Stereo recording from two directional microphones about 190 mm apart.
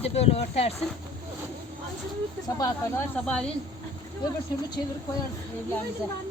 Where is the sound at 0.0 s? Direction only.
35° left (ahead or behind).